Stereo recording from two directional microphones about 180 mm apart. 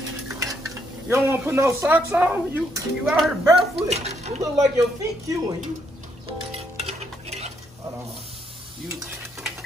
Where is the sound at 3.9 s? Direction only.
35° right (ahead or behind).